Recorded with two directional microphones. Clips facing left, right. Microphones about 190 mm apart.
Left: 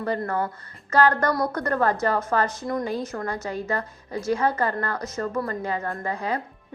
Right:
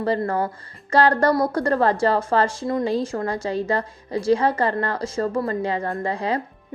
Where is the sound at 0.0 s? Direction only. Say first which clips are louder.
Right 4 dB; 30° right (ahead or behind).